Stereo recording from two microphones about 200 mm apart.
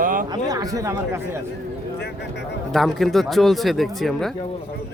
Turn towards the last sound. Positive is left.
turn(degrees=0)  # may be behind; listen again after turning